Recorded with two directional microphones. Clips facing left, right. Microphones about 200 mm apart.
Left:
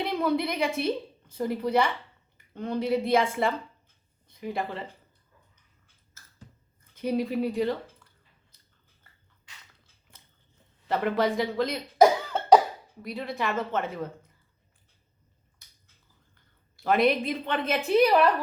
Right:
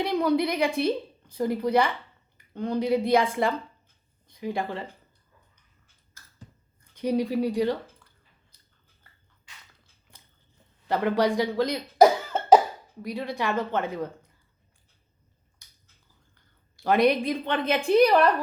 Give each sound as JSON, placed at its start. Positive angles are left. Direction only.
{"t": 0.0, "sound": "a woman's voice", "side_deg": 0}
{"t": 4.3, "sound": "speech", "side_deg": 0}
{"t": 6.9, "sound": "speech", "side_deg": 5}
{"t": 10.8, "sound": "a woman's voice", "side_deg": 0}
{"t": 16.7, "sound": "a woman's voice", "side_deg": 0}